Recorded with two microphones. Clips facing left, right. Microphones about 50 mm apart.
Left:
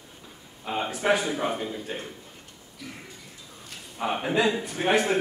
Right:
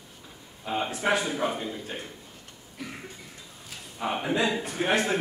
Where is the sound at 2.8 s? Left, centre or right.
Right.